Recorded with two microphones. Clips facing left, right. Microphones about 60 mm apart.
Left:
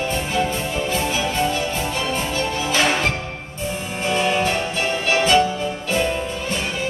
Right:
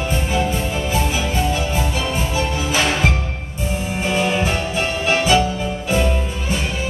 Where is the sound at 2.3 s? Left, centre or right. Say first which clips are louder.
Right 1 dB; centre.